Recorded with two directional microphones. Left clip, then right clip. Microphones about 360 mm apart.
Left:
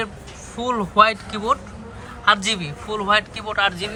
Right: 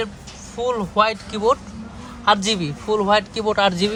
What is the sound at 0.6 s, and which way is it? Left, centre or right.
A man's voice, centre.